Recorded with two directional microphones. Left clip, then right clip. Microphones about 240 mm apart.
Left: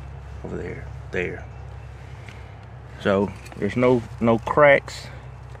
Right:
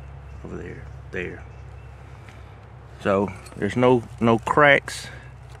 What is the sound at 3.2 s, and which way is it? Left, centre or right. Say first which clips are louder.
Speech: even; right.